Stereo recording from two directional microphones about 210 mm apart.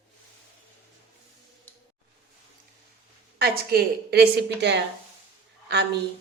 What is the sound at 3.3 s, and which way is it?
A woman's voice, 50° right (ahead or behind).